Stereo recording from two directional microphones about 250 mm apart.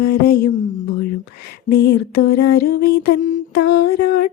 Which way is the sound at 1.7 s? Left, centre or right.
Left.